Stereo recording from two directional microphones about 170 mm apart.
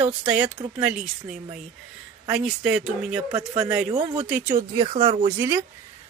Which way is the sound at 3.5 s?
15° right (ahead or behind).